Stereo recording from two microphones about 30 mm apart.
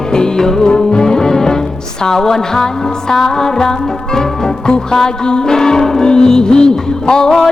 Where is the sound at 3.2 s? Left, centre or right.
Left.